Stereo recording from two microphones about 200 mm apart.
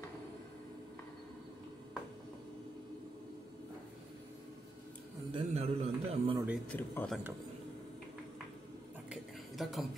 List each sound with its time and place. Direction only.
5.3 s a man's voice: 30° right (ahead or behind)
6.3 s speech: 10° right (ahead or behind)
6.7 s speech: 5° left (ahead or behind)
9.1 s a sound: centre (ahead or behind)